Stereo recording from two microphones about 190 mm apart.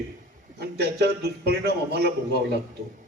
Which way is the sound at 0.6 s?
60° right (ahead or behind).